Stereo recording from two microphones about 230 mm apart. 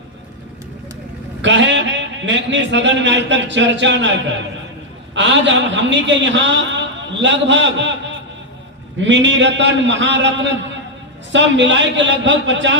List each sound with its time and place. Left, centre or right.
1.4 s a man's voice: right
5.1 s a man's voice: right
9.0 s a man's voice: right